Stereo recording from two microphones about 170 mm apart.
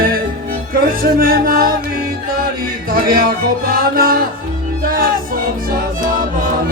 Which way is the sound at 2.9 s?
60° right (ahead or behind).